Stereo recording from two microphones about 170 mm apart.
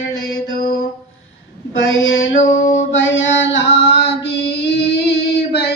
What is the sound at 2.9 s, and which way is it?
Mantra, 90° left.